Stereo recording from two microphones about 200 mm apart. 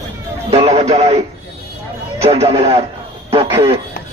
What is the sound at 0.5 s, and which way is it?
Speech, 30° right (ahead or behind).